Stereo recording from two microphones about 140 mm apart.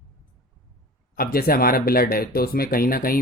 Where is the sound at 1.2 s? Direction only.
90° left.